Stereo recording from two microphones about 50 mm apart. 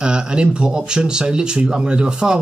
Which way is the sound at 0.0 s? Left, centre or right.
Centre.